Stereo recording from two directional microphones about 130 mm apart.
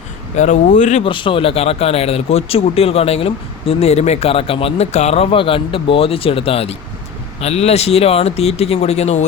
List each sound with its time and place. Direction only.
0.3 s speech: 70° left (ahead or behind)
1.0 s speech: 40° left (ahead or behind)